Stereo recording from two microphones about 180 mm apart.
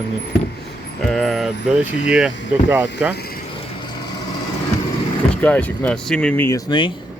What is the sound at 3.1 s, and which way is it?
Vehicle, 60° left (ahead or behind).